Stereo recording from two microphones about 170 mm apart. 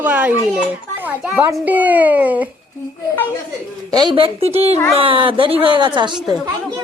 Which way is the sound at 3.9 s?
25° right (ahead or behind).